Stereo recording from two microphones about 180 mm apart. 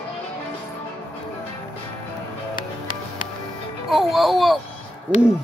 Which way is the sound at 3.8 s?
Centre (ahead or behind).